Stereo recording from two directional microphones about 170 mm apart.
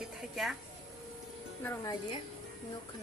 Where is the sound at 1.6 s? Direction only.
15° left (ahead or behind).